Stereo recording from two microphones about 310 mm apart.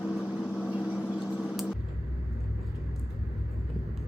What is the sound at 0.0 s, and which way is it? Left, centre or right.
Vehicle, centre.